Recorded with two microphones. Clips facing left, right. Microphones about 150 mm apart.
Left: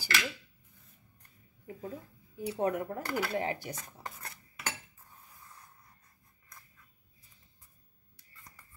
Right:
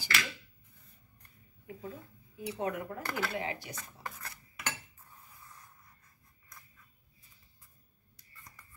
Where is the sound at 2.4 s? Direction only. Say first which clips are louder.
Left 4 dB; 45° left (ahead or behind).